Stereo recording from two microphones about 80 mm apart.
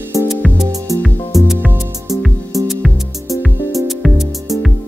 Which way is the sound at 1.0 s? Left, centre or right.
Left.